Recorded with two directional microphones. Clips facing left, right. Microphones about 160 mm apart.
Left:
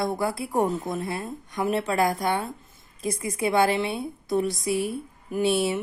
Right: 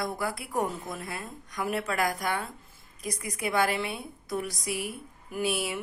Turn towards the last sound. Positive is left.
turn(degrees=25)  # may be behind; listen again after turning